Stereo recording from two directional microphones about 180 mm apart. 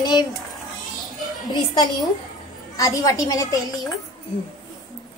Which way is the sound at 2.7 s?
20° left (ahead or behind).